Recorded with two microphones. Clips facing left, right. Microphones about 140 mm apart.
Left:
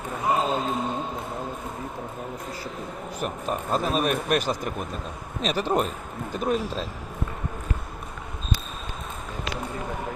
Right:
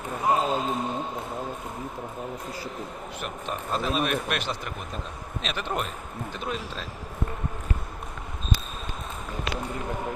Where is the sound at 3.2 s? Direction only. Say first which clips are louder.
Left 5 dB; 40° left (ahead or behind).